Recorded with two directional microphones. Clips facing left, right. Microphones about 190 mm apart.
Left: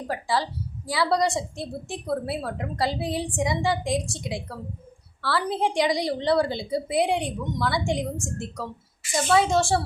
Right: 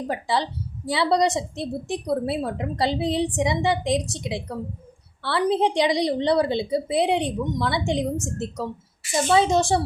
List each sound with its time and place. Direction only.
0.1 s a woman's voice: 20° right (ahead or behind)